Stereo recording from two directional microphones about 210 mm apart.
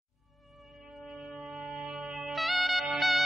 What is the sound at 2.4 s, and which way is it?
Music, centre (ahead or behind).